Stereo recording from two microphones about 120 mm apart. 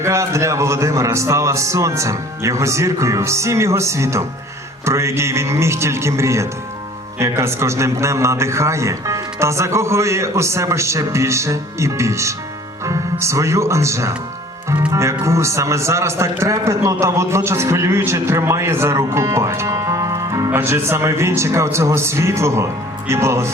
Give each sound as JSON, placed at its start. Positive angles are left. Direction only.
{"t": 0.0, "sound": "a man's voice", "side_deg": -25}
{"t": 15.2, "sound": "a man's voice", "side_deg": -25}